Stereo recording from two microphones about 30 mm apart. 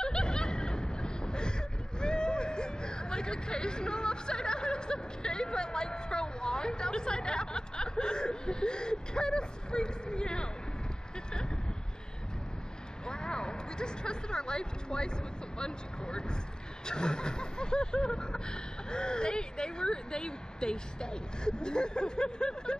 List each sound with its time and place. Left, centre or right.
0.0 s snicker: left
2.0 s hubbub: left
13.0 s speech: left